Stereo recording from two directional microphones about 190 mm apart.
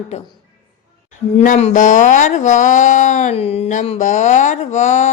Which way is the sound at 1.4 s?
35° left (ahead or behind).